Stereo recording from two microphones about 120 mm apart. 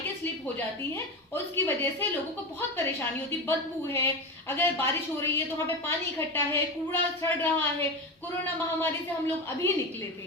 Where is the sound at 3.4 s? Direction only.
20° left (ahead or behind).